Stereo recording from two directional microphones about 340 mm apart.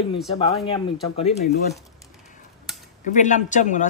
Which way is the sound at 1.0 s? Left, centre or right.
Centre.